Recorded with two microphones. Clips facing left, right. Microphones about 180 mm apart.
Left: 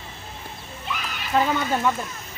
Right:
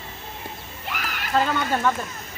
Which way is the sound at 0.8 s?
70° right (ahead or behind).